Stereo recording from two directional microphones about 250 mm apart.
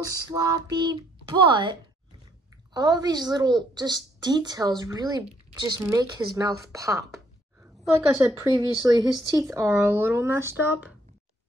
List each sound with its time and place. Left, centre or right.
0.0 s speech: centre